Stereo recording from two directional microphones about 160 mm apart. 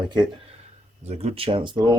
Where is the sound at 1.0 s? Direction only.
40° right (ahead or behind).